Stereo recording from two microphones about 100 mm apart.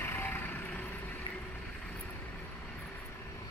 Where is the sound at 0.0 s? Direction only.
20° left (ahead or behind).